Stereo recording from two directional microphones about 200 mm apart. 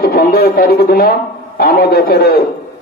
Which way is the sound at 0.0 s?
50° left (ahead or behind).